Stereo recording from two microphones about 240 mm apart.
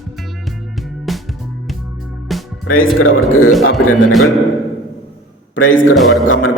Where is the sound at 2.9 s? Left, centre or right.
Left.